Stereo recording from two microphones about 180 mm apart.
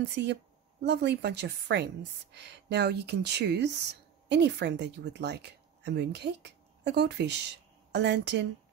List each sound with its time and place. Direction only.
0.0 s speech: 70° right (ahead or behind)